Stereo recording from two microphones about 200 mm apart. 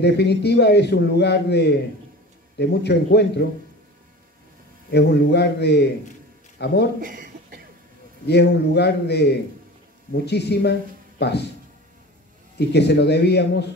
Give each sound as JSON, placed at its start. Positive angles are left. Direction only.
{"t": 0.0, "sound": "a man's voice", "side_deg": 55}
{"t": 4.9, "sound": "a man's voice", "side_deg": 55}
{"t": 7.0, "sound": "a sound", "side_deg": -45}
{"t": 8.3, "sound": "a man's voice", "side_deg": 55}
{"t": 12.5, "sound": "a man's voice", "side_deg": 55}